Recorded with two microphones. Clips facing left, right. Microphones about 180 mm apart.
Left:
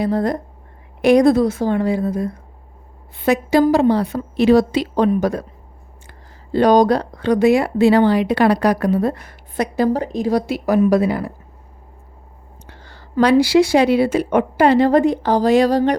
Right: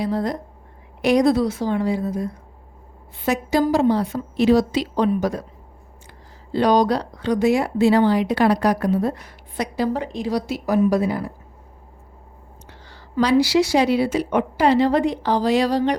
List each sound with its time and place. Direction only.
0.0 s speech: 55° left (ahead or behind)
6.5 s speech: 45° left (ahead or behind); by 11.3 s 70° left (ahead or behind)
12.6 s speech: 55° left (ahead or behind)